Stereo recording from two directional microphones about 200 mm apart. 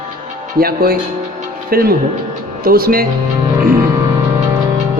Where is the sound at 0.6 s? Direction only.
50° right (ahead or behind).